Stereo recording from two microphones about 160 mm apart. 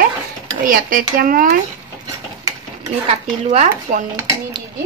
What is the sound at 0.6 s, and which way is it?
Speech, 60° right (ahead or behind).